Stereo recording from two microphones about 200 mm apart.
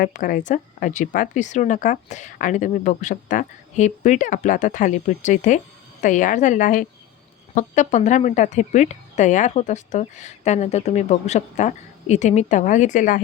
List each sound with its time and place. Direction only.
0.0 s speech: 45° left (ahead or behind)